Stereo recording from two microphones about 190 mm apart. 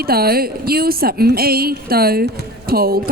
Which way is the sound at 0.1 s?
55° right (ahead or behind).